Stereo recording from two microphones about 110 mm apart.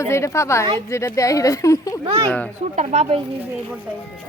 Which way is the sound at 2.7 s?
80° right.